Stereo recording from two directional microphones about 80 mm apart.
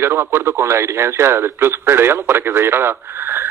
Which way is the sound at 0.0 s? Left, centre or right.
Right.